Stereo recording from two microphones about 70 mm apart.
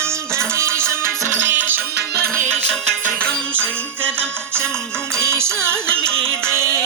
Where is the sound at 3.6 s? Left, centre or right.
Centre.